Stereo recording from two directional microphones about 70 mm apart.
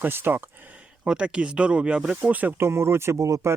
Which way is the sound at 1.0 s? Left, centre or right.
Centre.